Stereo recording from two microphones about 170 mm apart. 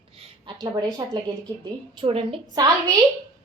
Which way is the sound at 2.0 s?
30° right (ahead or behind).